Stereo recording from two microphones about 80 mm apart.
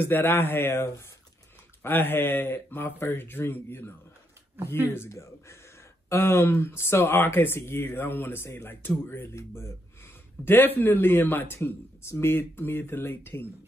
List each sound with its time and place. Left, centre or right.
0.0 s speech: left
4.9 s speech: left